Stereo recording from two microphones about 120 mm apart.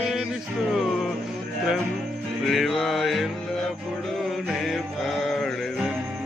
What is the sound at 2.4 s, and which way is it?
Music, centre (ahead or behind).